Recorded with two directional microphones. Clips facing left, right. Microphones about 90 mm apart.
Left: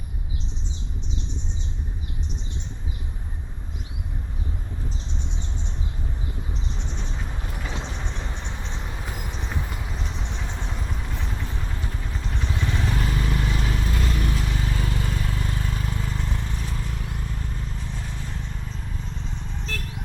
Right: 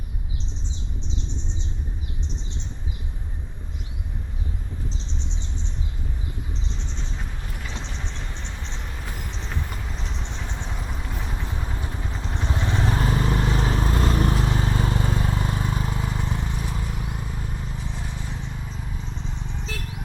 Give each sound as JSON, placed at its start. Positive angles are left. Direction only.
{"t": 7.9, "sound": "vehicle", "side_deg": 15}
{"t": 10.7, "sound": "vehicle", "side_deg": -5}